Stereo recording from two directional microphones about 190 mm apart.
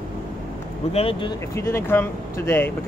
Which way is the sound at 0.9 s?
30° left (ahead or behind).